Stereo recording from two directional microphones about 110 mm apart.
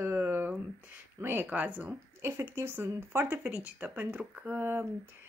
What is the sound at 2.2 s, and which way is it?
Speech, 25° right (ahead or behind).